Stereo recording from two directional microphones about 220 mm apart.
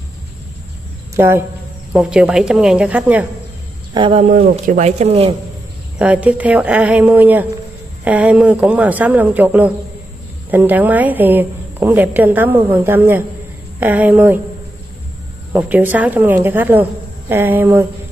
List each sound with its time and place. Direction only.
1.1 s speech: 10° right (ahead or behind)
3.9 s speech: 25° right (ahead or behind)
5.9 s a woman's voice: 5° right (ahead or behind)
15.5 s a woman's voice: 5° right (ahead or behind)